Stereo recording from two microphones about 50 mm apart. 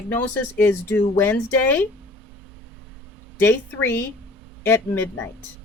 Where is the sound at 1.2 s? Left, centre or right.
Left.